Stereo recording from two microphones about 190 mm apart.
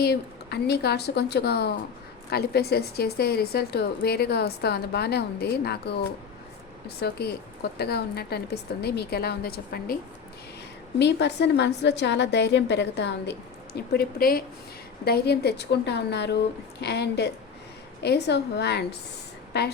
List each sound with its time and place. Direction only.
0.0 s a woman's voice: 55° left (ahead or behind)
11.0 s a woman's voice: 65° left (ahead or behind)